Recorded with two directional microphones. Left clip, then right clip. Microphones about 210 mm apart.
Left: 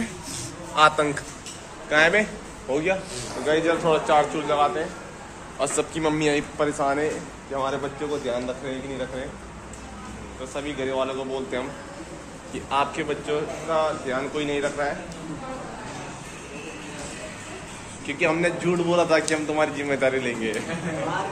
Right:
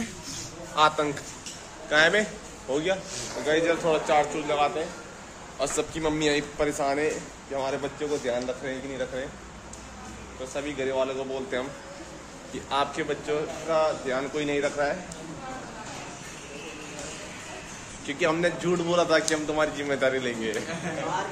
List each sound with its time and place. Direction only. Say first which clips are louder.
0.7 s a man's voice: left 4 dB; 10° right (ahead or behind)
10.5 s a man's voice: left 1 dB; 25° right (ahead or behind)
18.0 s a man's voice: left 2 dB; 25° right (ahead or behind)